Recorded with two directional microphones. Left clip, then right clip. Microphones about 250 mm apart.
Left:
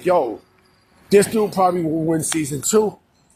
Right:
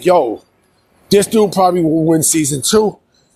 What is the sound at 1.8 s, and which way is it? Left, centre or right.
Speech, right.